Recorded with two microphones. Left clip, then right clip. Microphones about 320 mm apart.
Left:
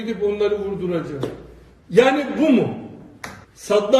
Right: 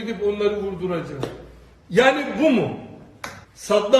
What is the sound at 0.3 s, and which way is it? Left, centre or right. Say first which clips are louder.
Speech: left 1 dB; right.